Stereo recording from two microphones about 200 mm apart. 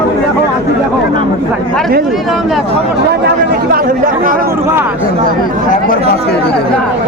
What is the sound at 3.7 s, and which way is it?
Speech, 45° right (ahead or behind).